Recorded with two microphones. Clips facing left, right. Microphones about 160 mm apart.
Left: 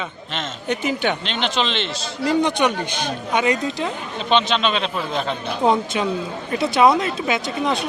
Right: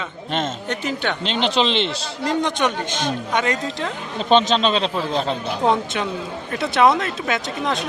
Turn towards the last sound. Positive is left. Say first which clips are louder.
# left 2 dB
turn(degrees=0)  # may be behind; listen again after turning